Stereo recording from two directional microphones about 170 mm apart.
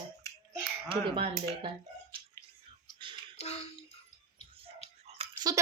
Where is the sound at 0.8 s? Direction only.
35° right (ahead or behind).